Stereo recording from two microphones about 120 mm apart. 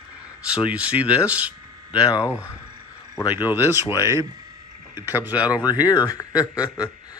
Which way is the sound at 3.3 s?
15° right (ahead or behind).